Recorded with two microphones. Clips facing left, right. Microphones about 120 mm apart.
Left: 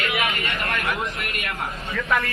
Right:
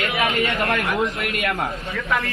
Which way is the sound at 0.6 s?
90° right.